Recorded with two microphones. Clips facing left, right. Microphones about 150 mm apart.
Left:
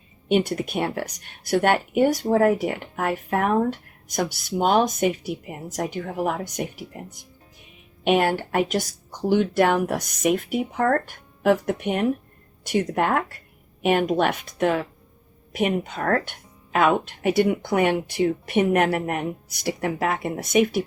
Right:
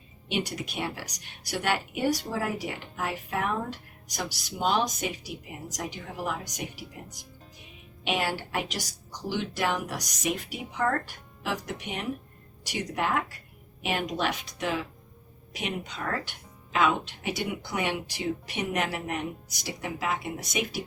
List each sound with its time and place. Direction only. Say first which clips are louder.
0.3 s speech: left 10 dB; 50° left (ahead or behind)
8.0 s a woman's voice: left 9 dB; 50° left (ahead or behind)